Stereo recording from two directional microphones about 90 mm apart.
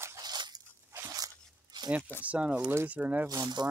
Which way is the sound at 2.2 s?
15° right (ahead or behind).